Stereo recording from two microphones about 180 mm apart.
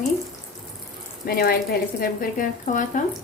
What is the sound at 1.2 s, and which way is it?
A woman's voice, 55° left (ahead or behind).